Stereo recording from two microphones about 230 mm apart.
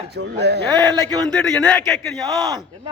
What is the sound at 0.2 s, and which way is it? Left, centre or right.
Speech, right.